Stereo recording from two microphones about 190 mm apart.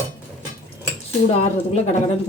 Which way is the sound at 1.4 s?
35° left (ahead or behind).